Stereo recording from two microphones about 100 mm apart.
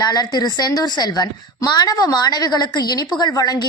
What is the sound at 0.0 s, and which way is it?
A woman's voice, 45° left (ahead or behind).